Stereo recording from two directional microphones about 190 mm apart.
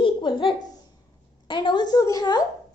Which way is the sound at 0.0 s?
25° left (ahead or behind).